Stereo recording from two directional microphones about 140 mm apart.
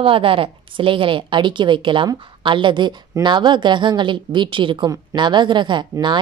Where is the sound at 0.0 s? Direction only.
40° right (ahead or behind).